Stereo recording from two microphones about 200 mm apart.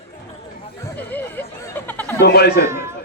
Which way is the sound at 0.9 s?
10° left (ahead or behind).